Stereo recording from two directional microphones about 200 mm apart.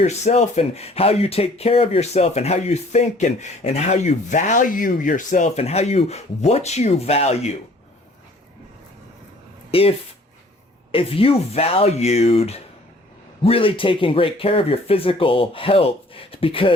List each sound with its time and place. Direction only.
0.0 s speech: 35° left (ahead or behind)
9.7 s speech: 30° left (ahead or behind)
10.9 s speech: 30° left (ahead or behind)